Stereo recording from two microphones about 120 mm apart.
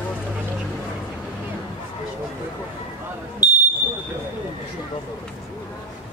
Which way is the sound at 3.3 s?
15° right (ahead or behind).